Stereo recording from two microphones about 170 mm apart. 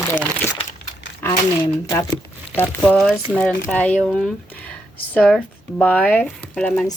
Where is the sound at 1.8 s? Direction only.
15° left (ahead or behind).